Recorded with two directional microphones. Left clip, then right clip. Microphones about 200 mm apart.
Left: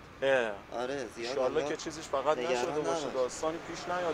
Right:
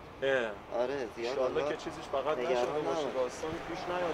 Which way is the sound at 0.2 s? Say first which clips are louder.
Left 2 dB; 25° left (ahead or behind).